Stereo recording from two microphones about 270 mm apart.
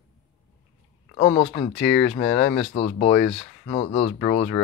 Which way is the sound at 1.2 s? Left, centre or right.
Centre.